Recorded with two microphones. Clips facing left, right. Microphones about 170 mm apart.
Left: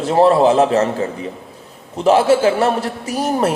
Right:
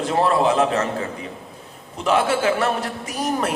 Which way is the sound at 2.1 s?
30° left (ahead or behind).